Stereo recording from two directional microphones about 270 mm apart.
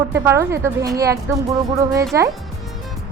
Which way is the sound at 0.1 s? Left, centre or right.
Centre.